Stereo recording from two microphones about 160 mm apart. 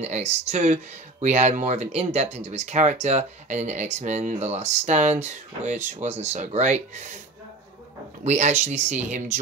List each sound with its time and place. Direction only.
0.0 s speech: 45° right (ahead or behind)
8.2 s speech: 45° right (ahead or behind)